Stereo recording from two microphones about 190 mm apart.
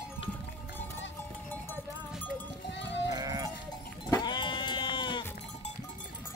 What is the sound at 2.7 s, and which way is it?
Livestock, 70° left (ahead or behind).